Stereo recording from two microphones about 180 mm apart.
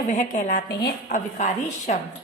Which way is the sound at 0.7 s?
65° left (ahead or behind).